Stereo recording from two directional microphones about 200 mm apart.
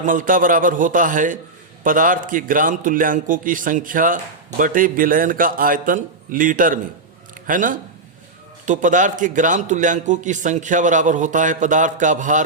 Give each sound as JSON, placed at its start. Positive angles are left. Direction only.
{"t": 0.0, "sound": "a man's voice", "side_deg": -40}